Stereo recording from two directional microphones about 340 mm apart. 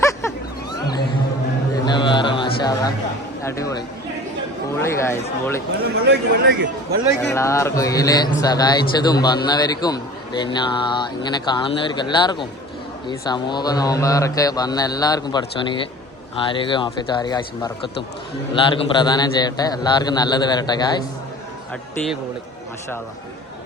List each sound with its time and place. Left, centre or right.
0.0 s music: centre
3.4 s speech: centre
6.1 s speech: right
7.2 s speech: centre